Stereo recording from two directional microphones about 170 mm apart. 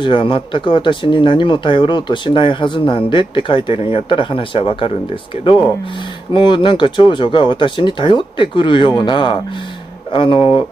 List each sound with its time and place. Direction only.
0.0 s speech: 30° left (ahead or behind)